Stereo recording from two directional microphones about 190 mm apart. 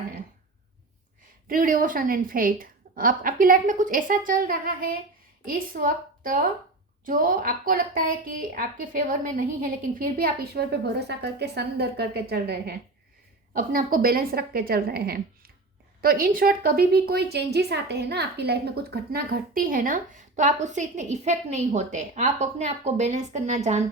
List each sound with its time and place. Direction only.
1.5 s a woman's voice: 45° right (ahead or behind)